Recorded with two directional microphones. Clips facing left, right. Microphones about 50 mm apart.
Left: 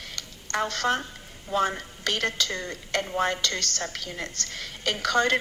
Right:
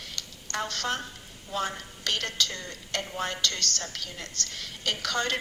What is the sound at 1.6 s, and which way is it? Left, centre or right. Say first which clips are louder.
A woman's voice: left 5 dB; left.